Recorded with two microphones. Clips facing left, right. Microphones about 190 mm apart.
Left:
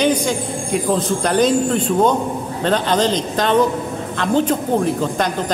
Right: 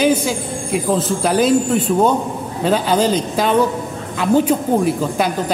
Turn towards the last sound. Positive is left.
turn(degrees=-5)  # may be behind; listen again after turning